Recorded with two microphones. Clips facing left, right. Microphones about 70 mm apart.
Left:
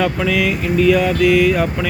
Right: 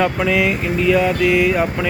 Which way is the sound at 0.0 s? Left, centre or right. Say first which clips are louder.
Even; centre.